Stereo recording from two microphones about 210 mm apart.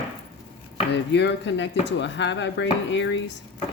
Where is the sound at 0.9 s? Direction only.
55° left (ahead or behind).